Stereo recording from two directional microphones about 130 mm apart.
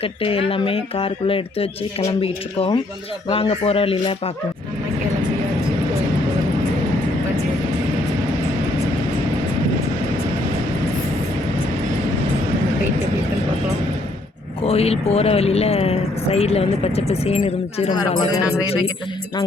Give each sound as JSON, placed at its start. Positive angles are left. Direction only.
{"t": 0.0, "sound": "speech", "side_deg": 45}
{"t": 14.6, "sound": "speech", "side_deg": 50}